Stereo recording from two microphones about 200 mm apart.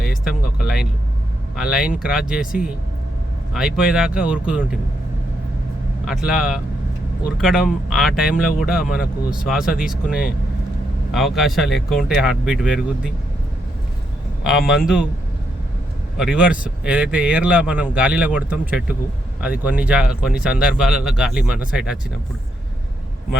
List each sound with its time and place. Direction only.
0.6 s vehicle: 5° right (ahead or behind)
1.7 s a man's voice: 5° right (ahead or behind)
6.1 s a man's voice: centre (ahead or behind)
8.8 s speech: 45° left (ahead or behind)
9.3 s a man's voice: 5° right (ahead or behind)
14.7 s a man's voice: 5° right (ahead or behind)
16.1 s a man's voice: 5° right (ahead or behind)